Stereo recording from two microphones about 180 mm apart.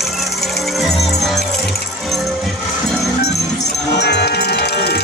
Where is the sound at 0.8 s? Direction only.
Centre (ahead or behind).